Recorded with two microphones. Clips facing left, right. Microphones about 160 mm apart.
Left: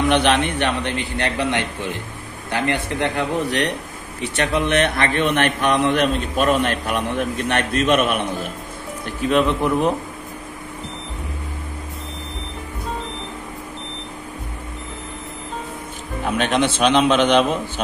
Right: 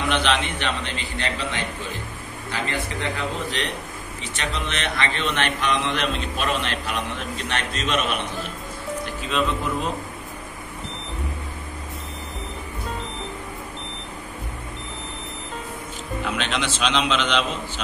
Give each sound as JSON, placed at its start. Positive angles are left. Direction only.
{"t": 0.1, "sound": "a man's voice", "side_deg": 60}
{"t": 16.3, "sound": "a man's voice", "side_deg": 50}